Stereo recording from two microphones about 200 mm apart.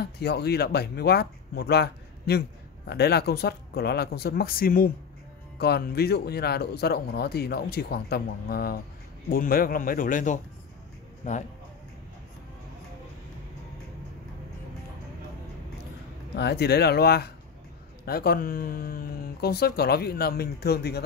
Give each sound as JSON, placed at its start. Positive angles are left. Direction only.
{"t": 0.0, "sound": "a man's voice", "side_deg": 55}
{"t": 16.3, "sound": "speech", "side_deg": 55}